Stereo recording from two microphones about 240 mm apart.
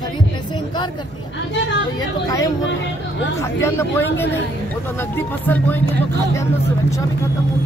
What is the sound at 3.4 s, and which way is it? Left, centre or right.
Speech, centre.